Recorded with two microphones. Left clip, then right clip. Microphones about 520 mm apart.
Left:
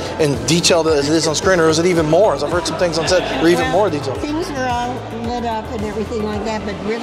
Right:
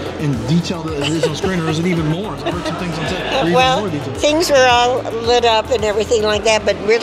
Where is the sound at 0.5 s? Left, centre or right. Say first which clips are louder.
Left 10 dB; left.